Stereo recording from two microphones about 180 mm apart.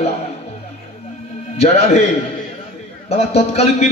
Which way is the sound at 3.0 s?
35° left (ahead or behind).